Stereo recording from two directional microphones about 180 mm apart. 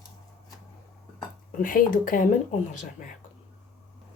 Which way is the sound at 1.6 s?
50° left (ahead or behind).